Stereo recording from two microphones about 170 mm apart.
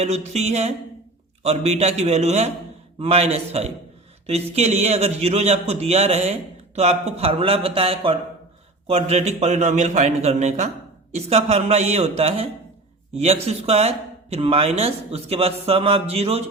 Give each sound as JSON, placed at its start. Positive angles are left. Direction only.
{"t": 0.0, "sound": "a man's voice", "side_deg": -40}